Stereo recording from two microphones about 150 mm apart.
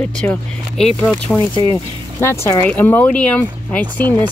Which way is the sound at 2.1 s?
15° left (ahead or behind).